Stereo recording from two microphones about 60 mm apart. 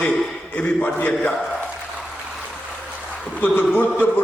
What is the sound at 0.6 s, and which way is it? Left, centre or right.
Speech, left.